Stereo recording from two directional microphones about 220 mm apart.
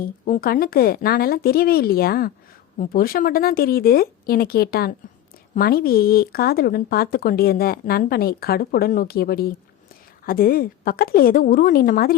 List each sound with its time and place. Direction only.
0.0 s a woman's voice: 40° left (ahead or behind)